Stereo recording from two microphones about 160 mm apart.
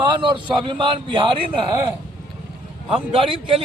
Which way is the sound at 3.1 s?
35° right (ahead or behind).